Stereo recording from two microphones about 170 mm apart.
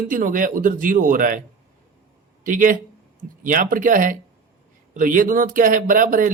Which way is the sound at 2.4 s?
50° right (ahead or behind).